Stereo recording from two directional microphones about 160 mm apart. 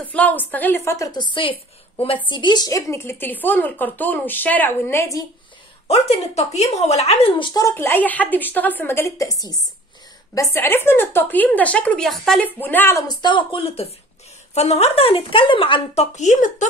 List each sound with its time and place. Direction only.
0.1 s a woman's voice: 10° left (ahead or behind)
1.3 s a woman's voice: 30° left (ahead or behind); by 5.2 s 15° left (ahead or behind)
5.9 s a woman's voice: 40° left (ahead or behind); by 13.0 s 15° left (ahead or behind)
13.1 s speech: 30° left (ahead or behind); by 16.6 s 50° left (ahead or behind)